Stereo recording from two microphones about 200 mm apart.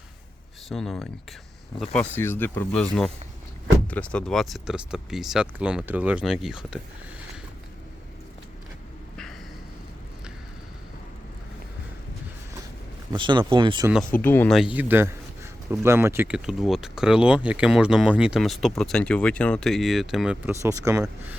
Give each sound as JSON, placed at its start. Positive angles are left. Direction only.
{"t": 0.7, "sound": "speech", "side_deg": 0}
{"t": 13.1, "sound": "speech", "side_deg": -25}
{"t": 14.1, "sound": "speech", "side_deg": 10}
{"t": 14.5, "sound": "speech", "side_deg": -5}